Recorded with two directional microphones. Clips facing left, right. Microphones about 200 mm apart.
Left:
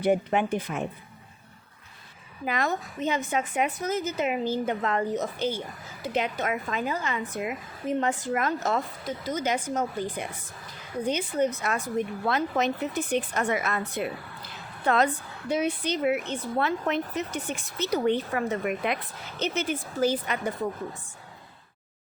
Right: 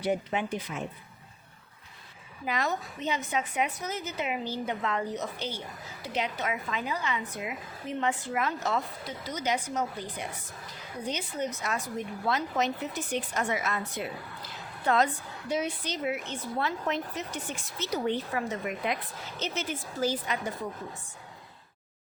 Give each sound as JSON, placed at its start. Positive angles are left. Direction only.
{"t": 0.0, "sound": "a woman's voice", "side_deg": 55}
{"t": 2.4, "sound": "a woman's voice", "side_deg": 50}